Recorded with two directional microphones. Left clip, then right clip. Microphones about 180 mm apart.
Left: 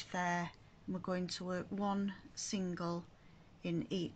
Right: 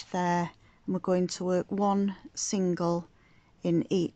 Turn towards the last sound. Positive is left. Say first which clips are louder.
# right 12 dB
turn(degrees=-35)  # may be behind; listen again after turning